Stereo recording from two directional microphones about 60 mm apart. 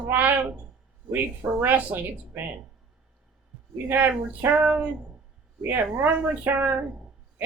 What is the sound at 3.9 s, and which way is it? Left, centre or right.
Speech, right.